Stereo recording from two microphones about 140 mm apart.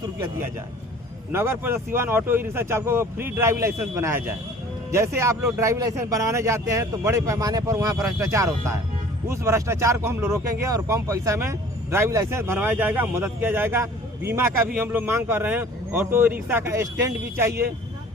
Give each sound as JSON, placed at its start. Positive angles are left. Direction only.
{"t": 1.3, "sound": "speech", "side_deg": -15}